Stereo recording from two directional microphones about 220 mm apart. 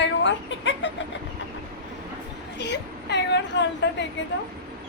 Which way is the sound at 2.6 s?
50° left (ahead or behind).